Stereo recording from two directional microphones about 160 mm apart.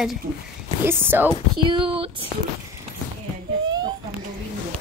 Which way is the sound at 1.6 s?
30° right (ahead or behind).